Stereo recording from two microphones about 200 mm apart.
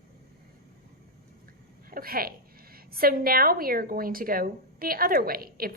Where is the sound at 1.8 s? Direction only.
45° right (ahead or behind).